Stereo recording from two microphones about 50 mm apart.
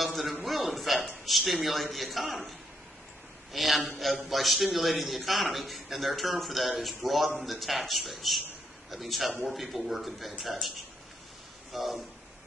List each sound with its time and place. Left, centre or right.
0.0 s a sound: centre
1.2 s a man's voice: centre
3.5 s a man's voice: centre
11.7 s a man's voice: centre